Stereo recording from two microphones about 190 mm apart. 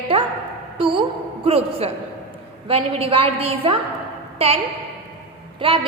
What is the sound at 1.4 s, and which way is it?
A woman's voice, 30° right (ahead or behind).